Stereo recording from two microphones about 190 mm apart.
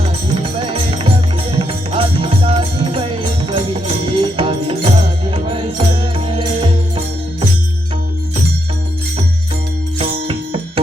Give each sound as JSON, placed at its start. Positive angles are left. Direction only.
{"t": 0.0, "sound": "music", "side_deg": -30}
{"t": 10.0, "sound": "music", "side_deg": -30}